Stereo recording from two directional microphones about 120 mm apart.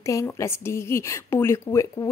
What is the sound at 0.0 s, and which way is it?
A woman's voice, 25° left (ahead or behind).